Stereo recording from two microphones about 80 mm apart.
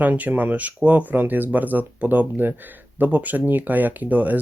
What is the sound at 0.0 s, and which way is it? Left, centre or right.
Speech, right.